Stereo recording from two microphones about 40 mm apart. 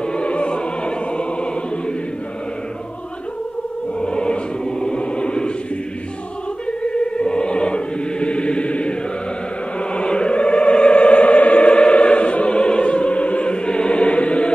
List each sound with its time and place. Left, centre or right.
0.0 s opera: left
4.0 s music: left
7.2 s choir: left
9.8 s chant: left